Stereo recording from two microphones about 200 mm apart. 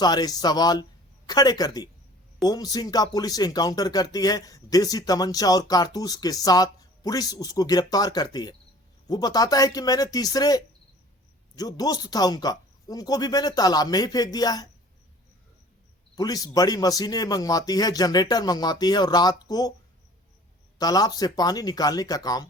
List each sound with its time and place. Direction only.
0.0 s speech: 20° left (ahead or behind)
16.1 s speech: 20° left (ahead or behind)
20.7 s speech: 20° left (ahead or behind)